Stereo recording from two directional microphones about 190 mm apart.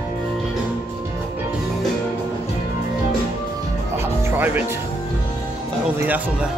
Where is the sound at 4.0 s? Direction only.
10° right (ahead or behind).